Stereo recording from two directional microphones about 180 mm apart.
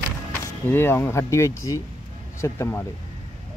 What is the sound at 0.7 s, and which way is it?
Speech, 10° left (ahead or behind).